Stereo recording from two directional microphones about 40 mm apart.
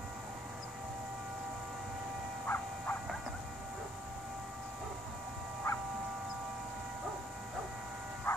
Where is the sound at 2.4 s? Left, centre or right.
Left.